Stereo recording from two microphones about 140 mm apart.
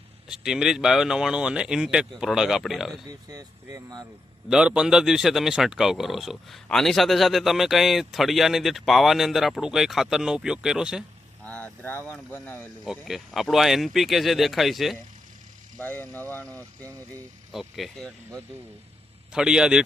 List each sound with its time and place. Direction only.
0.3 s speech: 5° right (ahead or behind)
3.1 s speech: 25° right (ahead or behind)
4.4 s speech: 5° right (ahead or behind)
11.4 s speech: 10° left (ahead or behind)
12.8 s speech: centre (ahead or behind)
15.8 s speech: 15° left (ahead or behind)
17.5 s speech: centre (ahead or behind)